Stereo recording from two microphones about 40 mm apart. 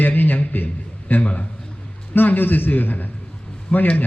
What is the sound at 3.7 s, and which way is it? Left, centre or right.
Speech, left.